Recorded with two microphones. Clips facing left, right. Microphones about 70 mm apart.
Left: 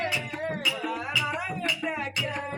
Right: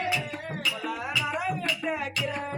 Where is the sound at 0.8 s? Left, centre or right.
Centre.